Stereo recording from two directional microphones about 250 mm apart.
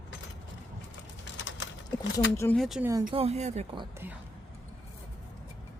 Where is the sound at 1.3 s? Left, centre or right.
Left.